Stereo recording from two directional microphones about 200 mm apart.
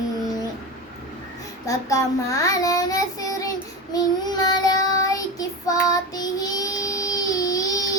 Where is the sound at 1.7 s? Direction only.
15° left (ahead or behind).